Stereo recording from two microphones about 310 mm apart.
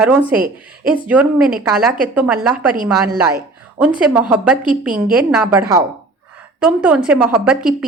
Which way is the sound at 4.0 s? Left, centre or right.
Centre.